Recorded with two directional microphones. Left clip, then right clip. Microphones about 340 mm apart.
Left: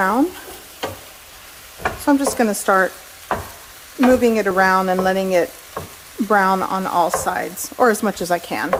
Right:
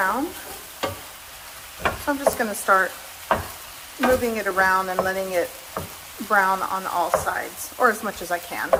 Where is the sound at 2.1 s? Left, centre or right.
Left.